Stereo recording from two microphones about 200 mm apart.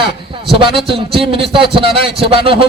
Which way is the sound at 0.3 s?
25° right (ahead or behind).